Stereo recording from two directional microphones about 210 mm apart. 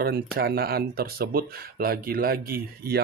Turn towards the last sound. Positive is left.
turn(degrees=-50)  # may be behind; listen again after turning